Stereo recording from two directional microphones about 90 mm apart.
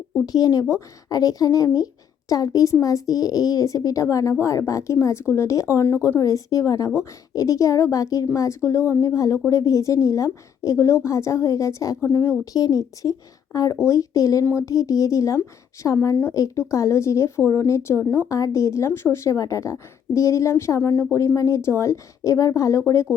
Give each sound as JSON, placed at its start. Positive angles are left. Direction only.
{"t": 0.3, "sound": "a woman's voice", "side_deg": 45}
{"t": 5.8, "sound": "a woman's voice", "side_deg": 25}